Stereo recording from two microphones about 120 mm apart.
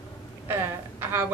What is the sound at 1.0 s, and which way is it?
Speech, 20° right (ahead or behind).